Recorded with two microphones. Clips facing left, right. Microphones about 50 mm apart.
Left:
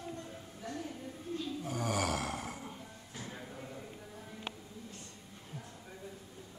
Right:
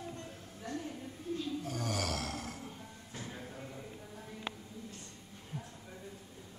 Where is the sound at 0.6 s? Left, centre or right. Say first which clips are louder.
Right 1 dB; centre.